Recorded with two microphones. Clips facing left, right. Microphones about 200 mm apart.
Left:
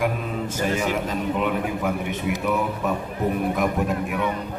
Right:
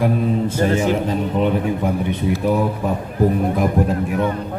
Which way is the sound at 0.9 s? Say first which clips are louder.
Right 5 dB; 30° right (ahead or behind).